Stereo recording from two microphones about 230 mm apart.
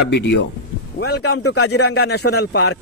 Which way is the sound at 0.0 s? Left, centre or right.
Left.